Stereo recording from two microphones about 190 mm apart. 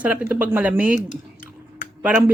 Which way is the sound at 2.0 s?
10° right (ahead or behind).